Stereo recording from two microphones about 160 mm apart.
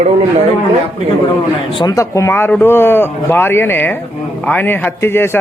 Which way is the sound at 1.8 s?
20° left (ahead or behind).